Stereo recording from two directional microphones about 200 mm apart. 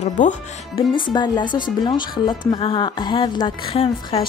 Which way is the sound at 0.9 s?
20° left (ahead or behind).